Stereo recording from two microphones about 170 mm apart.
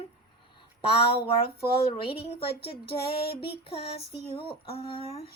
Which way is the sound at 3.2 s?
70° left (ahead or behind).